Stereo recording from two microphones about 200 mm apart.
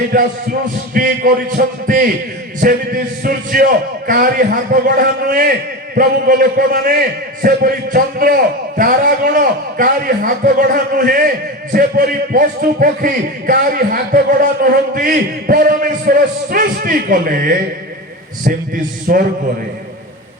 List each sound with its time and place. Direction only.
0.1 s a man's voice: 45° right (ahead or behind)